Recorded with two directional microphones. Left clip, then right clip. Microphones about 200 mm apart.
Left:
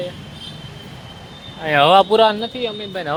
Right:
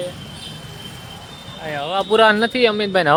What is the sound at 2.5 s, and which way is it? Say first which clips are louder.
Speech: right 9 dB; 40° right (ahead or behind).